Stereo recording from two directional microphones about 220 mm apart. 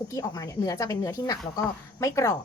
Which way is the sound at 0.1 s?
15° left (ahead or behind).